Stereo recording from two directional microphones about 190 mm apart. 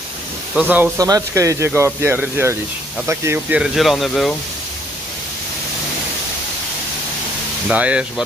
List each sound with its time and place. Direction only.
0.6 s speech: 10° right (ahead or behind)
7.6 s speech: 5° right (ahead or behind)